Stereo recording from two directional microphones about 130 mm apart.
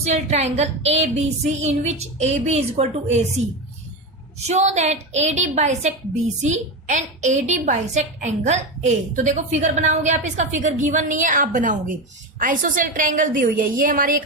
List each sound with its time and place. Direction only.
0.0 s music: 60° right (ahead or behind)
4.4 s music: 60° right (ahead or behind)
6.4 s a woman's voice: 70° right (ahead or behind); by 14.2 s 90° right